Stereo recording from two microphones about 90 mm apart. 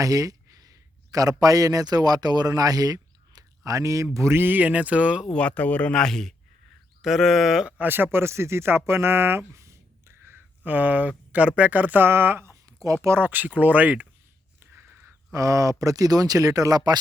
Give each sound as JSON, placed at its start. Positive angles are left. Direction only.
{"t": 0.0, "sound": "speech", "side_deg": -40}
{"t": 5.3, "sound": "speech", "side_deg": 15}
{"t": 7.8, "sound": "speech", "side_deg": -25}
{"t": 14.6, "sound": "a sound", "side_deg": -25}
{"t": 15.3, "sound": "speech", "side_deg": -40}